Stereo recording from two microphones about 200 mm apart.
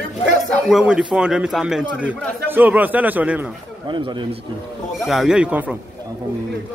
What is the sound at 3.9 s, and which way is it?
Speech, 25° right (ahead or behind).